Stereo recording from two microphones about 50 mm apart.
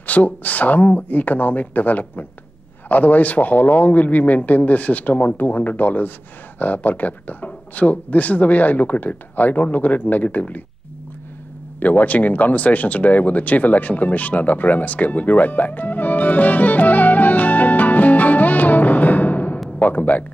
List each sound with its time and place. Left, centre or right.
0.0 s speech: left
11.8 s speech: left